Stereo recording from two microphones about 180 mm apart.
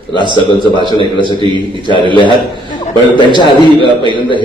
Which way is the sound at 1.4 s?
25° right (ahead or behind).